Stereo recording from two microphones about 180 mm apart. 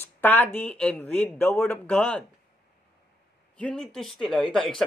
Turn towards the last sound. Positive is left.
turn(degrees=0)  # may be behind; listen again after turning